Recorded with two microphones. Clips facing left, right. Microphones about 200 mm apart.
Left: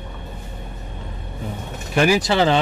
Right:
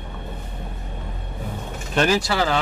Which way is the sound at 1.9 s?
10° left (ahead or behind).